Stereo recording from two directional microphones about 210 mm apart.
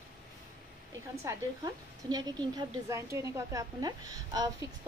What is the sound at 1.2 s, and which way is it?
A woman's voice, 20° right (ahead or behind).